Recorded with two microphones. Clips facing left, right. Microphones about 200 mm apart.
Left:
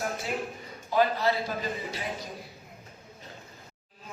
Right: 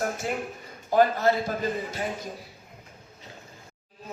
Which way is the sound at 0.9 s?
50° right (ahead or behind).